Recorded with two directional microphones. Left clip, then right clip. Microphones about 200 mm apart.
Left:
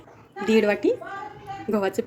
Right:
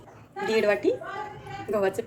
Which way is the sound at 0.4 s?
45° left (ahead or behind).